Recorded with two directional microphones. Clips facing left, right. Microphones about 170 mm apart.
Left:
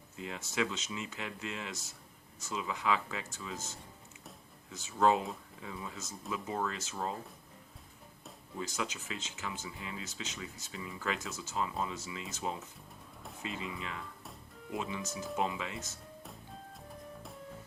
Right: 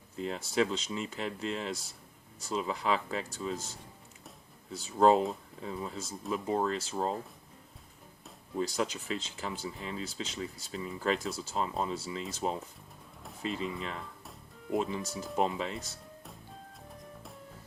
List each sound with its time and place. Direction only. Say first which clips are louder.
0.2 s speech: right 5 dB; 35° right (ahead or behind)
8.5 s speech: right 6 dB; 35° right (ahead or behind)